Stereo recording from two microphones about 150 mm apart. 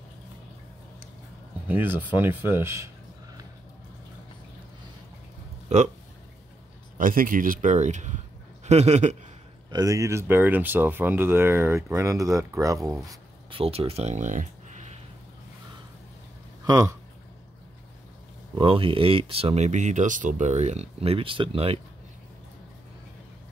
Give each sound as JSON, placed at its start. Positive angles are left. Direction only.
{"t": 1.7, "sound": "speech", "side_deg": -10}
{"t": 7.0, "sound": "speech", "side_deg": -65}
{"t": 9.7, "sound": "speech", "side_deg": -25}
{"t": 13.5, "sound": "speech", "side_deg": -40}
{"t": 16.6, "sound": "speech", "side_deg": -20}
{"t": 18.6, "sound": "speech", "side_deg": -35}